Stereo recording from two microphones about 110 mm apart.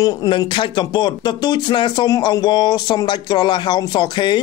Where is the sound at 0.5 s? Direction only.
45° left (ahead or behind).